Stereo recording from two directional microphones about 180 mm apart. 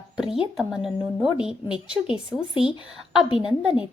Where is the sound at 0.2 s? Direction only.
Centre (ahead or behind).